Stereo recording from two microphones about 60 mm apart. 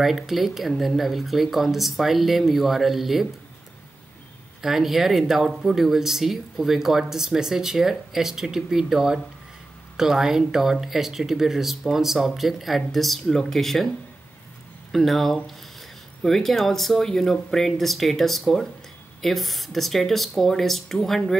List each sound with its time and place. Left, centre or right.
0.0 s speech: centre
4.6 s speech: centre
14.9 s speech: centre